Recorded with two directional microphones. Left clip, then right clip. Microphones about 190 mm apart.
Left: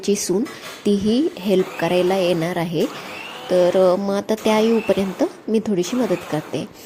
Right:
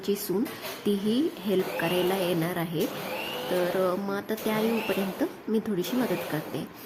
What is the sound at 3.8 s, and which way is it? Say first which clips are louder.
A woman's voice: left 11 dB; 25° left (ahead or behind).